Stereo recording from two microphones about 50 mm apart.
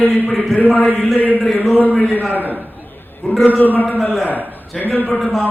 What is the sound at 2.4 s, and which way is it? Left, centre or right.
Speech, right.